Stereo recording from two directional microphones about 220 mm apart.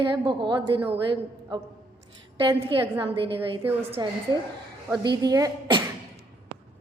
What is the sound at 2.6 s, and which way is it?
Speech, 20° right (ahead or behind).